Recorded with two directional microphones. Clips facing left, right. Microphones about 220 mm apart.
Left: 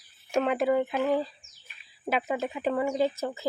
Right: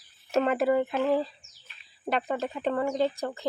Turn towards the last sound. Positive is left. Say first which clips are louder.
# even
turn(degrees=5)  # may be behind; listen again after turning